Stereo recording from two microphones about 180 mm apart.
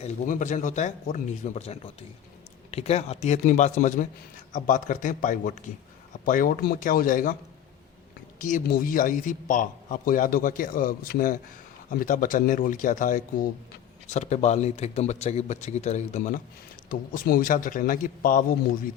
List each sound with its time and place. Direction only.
0.0 s a man's voice: 45° left (ahead or behind)
8.4 s a man's voice: 50° left (ahead or behind)